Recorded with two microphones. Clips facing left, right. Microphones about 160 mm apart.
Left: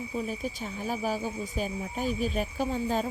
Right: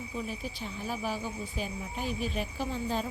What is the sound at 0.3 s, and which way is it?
Speech, 45° left (ahead or behind).